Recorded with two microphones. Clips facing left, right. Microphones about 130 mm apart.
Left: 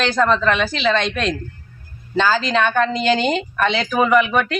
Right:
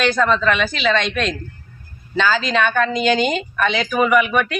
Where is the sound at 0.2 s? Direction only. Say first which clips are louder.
Left 3 dB; 15° left (ahead or behind).